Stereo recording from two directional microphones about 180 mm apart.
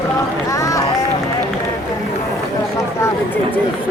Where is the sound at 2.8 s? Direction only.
10° left (ahead or behind).